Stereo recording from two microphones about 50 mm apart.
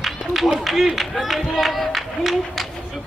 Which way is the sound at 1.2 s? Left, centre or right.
Centre.